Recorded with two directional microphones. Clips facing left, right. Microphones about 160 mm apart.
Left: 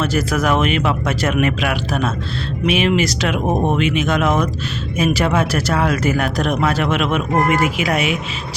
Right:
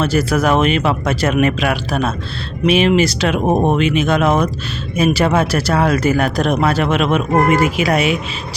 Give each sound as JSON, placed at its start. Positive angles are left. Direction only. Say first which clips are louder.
{"t": 0.0, "sound": "speech", "louder": "right 3 dB", "side_deg": -30}